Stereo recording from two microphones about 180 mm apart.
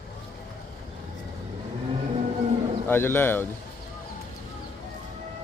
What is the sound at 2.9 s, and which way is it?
Speech, 10° left (ahead or behind).